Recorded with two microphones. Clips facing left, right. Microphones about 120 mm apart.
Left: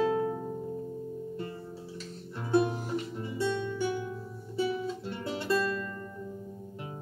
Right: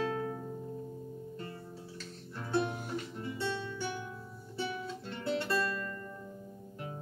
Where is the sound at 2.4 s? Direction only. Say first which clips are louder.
Left 6 dB; 15° left (ahead or behind).